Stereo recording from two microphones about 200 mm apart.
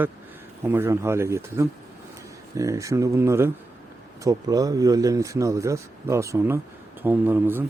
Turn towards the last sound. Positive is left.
turn(degrees=-10)  # may be behind; listen again after turning